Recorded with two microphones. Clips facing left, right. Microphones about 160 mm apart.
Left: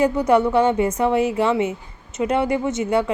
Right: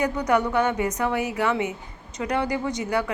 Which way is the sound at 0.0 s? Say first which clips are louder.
Left 6 dB; 25° left (ahead or behind).